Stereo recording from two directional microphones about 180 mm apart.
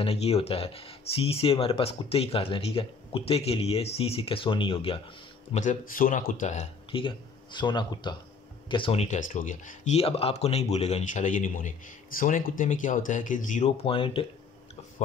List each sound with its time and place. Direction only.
0.0 s speech: 35° left (ahead or behind)
5.5 s speech: 40° left (ahead or behind)
9.3 s speech: 45° left (ahead or behind)
13.8 s speech: 30° left (ahead or behind)